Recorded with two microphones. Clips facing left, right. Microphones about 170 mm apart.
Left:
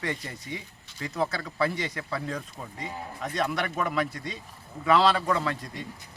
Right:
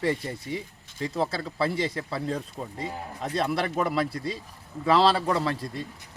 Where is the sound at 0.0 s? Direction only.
30° right (ahead or behind).